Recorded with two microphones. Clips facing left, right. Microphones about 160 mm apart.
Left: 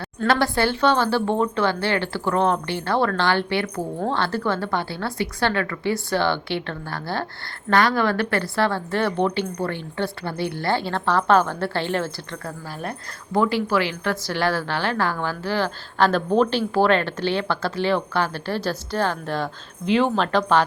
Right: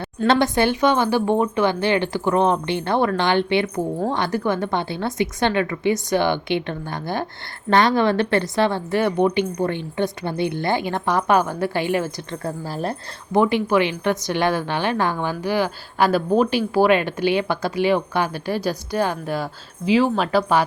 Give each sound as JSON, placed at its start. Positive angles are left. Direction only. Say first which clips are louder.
{"t": 0.2, "sound": "a woman's voice", "louder": "right 3 dB", "side_deg": -20}
{"t": 12.5, "sound": "speech", "louder": "right 6 dB", "side_deg": -30}
{"t": 13.3, "sound": "a woman's voice", "louder": "right 3 dB", "side_deg": -20}